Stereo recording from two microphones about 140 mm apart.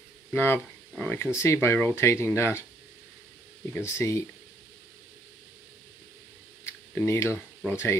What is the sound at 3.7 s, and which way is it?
Speech, 20° left (ahead or behind).